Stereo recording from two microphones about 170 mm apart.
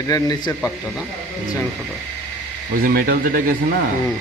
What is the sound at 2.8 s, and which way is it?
Speech, 60° right (ahead or behind).